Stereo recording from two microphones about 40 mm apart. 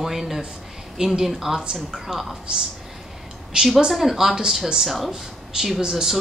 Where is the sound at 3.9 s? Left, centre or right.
Centre.